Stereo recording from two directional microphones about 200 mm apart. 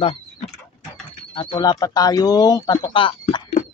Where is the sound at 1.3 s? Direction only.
20° left (ahead or behind).